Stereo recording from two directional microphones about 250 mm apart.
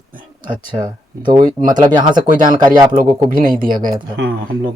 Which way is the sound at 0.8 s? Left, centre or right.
Centre.